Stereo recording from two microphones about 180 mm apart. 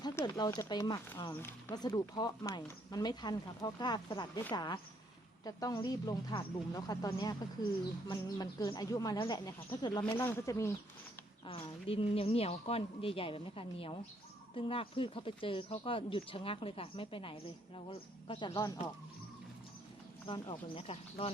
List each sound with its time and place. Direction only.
0.0 s speech: 20° left (ahead or behind)
11.4 s a woman's voice: 30° left (ahead or behind)
20.2 s a woman's voice: 30° left (ahead or behind)